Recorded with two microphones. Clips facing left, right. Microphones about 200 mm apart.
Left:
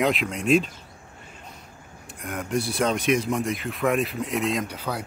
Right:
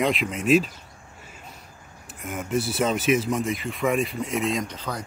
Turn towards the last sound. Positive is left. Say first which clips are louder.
# left 1 dB
turn(degrees=10)  # may be behind; listen again after turning